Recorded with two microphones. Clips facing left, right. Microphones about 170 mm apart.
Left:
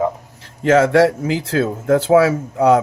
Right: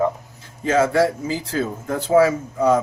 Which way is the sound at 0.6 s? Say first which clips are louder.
Left 5 dB; 70° left (ahead or behind).